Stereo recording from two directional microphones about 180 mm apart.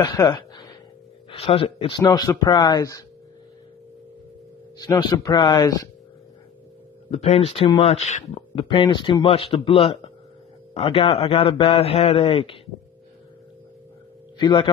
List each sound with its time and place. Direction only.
0.0 s speech: 20° left (ahead or behind)
4.7 s speech: 20° left (ahead or behind)
7.1 s speech: 35° left (ahead or behind)
14.4 s speech: 25° left (ahead or behind)